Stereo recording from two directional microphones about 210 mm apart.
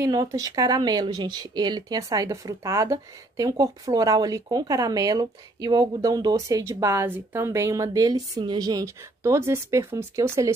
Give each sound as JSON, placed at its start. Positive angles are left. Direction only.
{"t": 0.0, "sound": "speech", "side_deg": -15}